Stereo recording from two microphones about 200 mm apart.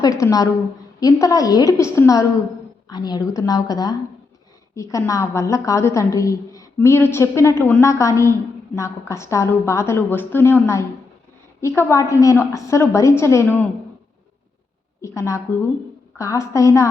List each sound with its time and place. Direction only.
0.0 s a woman's voice: 20° left (ahead or behind)
15.0 s a woman's voice: 15° left (ahead or behind)